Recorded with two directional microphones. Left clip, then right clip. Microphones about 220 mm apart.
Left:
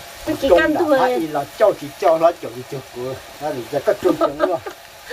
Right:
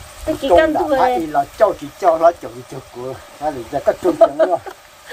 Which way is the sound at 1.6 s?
35° right (ahead or behind).